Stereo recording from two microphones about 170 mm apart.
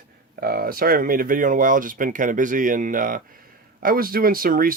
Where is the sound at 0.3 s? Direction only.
65° right (ahead or behind).